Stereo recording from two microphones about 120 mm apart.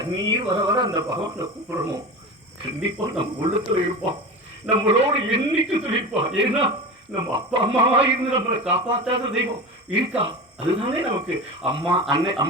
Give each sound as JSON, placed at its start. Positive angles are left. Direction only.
{"t": 0.0, "sound": "speech", "side_deg": -35}
{"t": 3.1, "sound": "a man's voice", "side_deg": -50}